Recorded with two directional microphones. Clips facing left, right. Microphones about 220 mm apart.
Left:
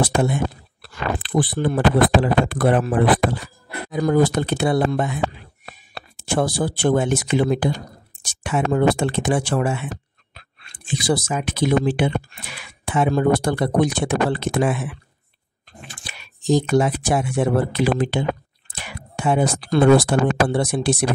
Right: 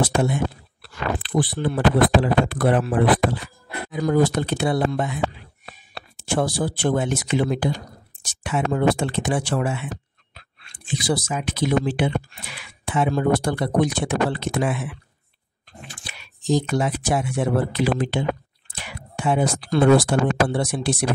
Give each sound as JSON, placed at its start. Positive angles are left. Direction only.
{"t": 0.1, "sound": "speech", "side_deg": 50}
{"t": 6.2, "sound": "speech", "side_deg": 50}
{"t": 16.1, "sound": "speech", "side_deg": 50}